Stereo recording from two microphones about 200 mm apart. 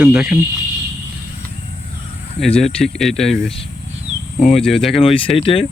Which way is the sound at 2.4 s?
Centre (ahead or behind).